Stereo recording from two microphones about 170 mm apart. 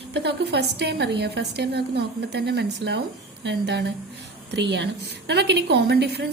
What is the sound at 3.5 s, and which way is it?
A woman's voice, 90° right.